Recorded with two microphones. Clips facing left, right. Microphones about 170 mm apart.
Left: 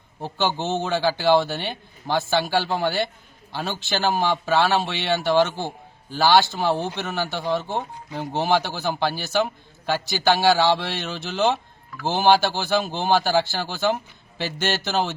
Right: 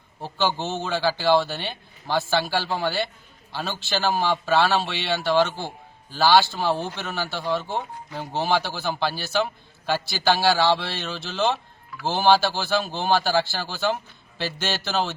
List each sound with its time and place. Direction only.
0.2 s a man's voice: 15° left (ahead or behind)